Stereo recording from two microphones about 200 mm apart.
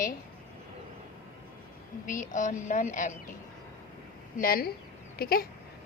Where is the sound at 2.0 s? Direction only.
40° left (ahead or behind).